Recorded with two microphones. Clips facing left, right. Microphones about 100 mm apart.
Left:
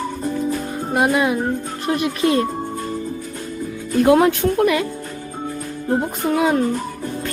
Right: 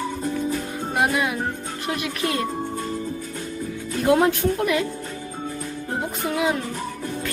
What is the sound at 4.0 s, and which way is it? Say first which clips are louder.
Speech: left 5 dB; 65° left (ahead or behind).